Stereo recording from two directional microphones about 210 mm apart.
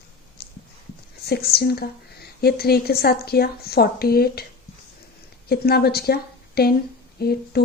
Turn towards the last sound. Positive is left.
turn(degrees=50)  # may be behind; listen again after turning